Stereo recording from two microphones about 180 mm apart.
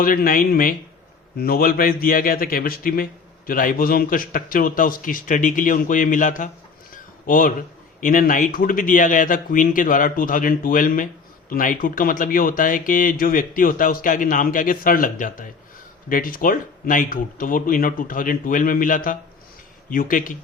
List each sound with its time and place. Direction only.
0.0 s speech: 55° left (ahead or behind)
6.9 s a sound: 50° left (ahead or behind)
8.0 s speech: 50° left (ahead or behind)